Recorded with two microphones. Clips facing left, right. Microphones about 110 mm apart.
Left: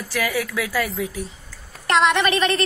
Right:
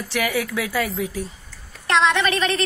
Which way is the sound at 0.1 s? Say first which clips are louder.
Even; 25° right (ahead or behind).